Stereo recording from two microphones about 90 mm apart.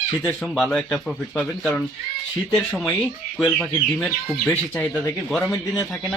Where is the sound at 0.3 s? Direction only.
5° left (ahead or behind).